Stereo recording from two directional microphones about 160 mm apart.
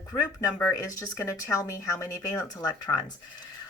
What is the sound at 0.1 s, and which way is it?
Speech, 20° left (ahead or behind).